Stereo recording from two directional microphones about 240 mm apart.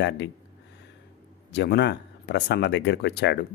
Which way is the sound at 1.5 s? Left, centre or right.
Left.